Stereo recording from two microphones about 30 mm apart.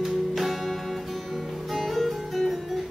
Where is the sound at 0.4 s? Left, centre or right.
Centre.